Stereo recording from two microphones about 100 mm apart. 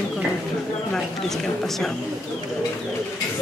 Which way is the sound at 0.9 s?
5° left (ahead or behind).